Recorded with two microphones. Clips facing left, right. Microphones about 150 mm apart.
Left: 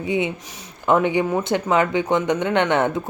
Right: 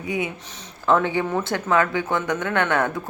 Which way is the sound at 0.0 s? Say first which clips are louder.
Left 4 dB; 25° left (ahead or behind).